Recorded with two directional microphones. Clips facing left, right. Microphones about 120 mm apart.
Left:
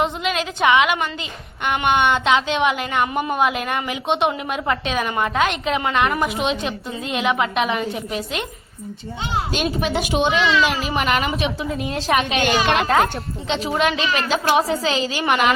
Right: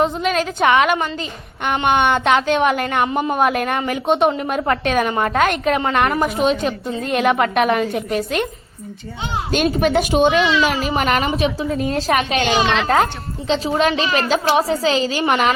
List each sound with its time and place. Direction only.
0.0 s a woman's voice: 40° right (ahead or behind)
9.5 s a woman's voice: 50° right (ahead or behind)
13.7 s a woman's voice: 35° right (ahead or behind)